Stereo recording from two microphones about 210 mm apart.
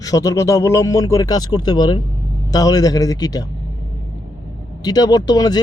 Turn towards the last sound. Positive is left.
turn(degrees=20)  # may be behind; listen again after turning